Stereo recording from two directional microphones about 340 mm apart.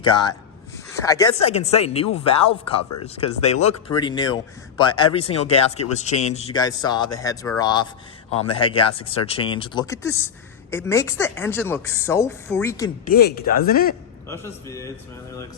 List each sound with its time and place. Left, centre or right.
0.1 s speech: centre
13.1 s speech: left
14.3 s speech: centre